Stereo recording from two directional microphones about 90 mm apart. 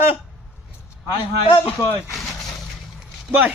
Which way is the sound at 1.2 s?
85° left.